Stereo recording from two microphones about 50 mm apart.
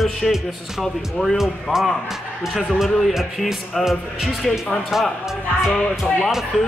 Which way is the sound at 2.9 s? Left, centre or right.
Centre.